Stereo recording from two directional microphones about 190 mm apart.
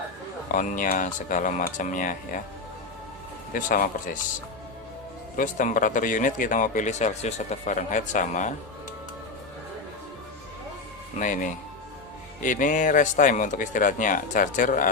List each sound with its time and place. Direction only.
0.4 s speech: 40° left (ahead or behind)
3.5 s speech: 45° left (ahead or behind)
5.4 s speech: 45° left (ahead or behind)
12.4 s speech: 45° left (ahead or behind)